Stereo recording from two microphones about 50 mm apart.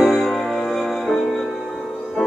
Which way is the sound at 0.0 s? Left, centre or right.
Centre.